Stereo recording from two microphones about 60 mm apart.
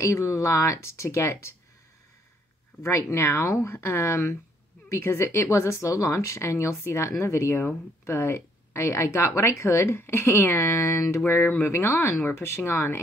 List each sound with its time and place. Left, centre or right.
0.0 s speech: left
2.8 s speech: left